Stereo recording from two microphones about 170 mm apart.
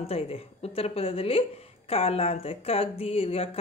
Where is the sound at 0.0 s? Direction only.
35° left (ahead or behind).